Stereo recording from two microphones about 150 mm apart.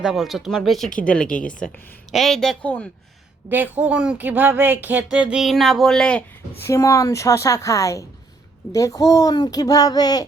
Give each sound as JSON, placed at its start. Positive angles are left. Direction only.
{"t": 0.0, "sound": "a woman's voice", "side_deg": -5}
{"t": 3.5, "sound": "speech", "side_deg": -10}
{"t": 6.7, "sound": "a child's voice", "side_deg": 20}